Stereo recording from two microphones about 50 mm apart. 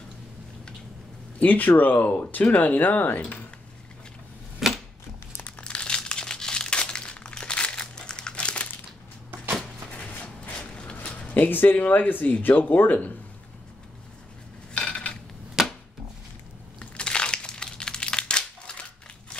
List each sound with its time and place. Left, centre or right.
1.4 s speech: left
4.6 s a sound: centre
5.6 s crumpling: left
9.9 s a sound: left
11.1 s zipper: left
11.4 s speech: left
14.7 s dishes: left
15.6 s a sound: centre
16.9 s crumpling: centre